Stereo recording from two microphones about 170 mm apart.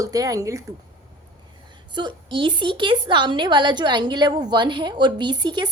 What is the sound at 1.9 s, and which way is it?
A woman's voice, 25° right (ahead or behind).